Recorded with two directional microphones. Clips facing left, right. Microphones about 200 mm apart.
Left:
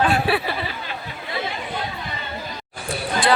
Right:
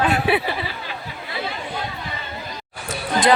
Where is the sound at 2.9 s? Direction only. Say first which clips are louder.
Right 2 dB; 20° right (ahead or behind).